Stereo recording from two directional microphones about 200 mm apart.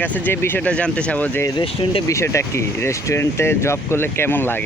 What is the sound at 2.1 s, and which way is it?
Speech, 15° left (ahead or behind).